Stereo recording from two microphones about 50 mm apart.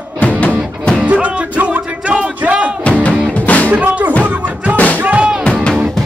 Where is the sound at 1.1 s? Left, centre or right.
Right.